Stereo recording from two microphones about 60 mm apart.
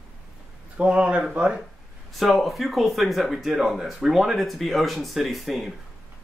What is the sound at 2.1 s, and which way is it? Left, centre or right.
Speech, centre.